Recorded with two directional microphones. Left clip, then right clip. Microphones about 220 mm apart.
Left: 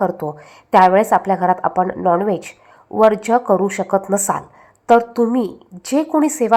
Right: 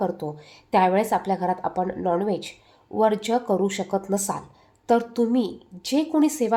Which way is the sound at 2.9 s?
35° left (ahead or behind).